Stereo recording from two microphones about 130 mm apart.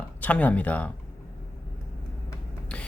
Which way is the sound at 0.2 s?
10° left (ahead or behind).